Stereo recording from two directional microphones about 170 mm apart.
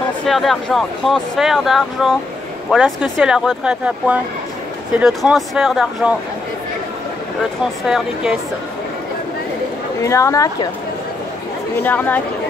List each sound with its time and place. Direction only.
0.3 s speech: centre (ahead or behind)
7.8 s speech: 5° right (ahead or behind)
10.0 s a woman's voice: 20° left (ahead or behind)
11.7 s speech: 10° left (ahead or behind)